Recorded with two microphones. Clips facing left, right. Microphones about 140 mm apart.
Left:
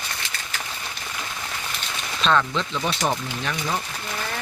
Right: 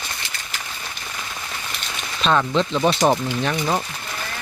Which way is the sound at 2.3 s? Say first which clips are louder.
Right 4 dB; 25° right (ahead or behind).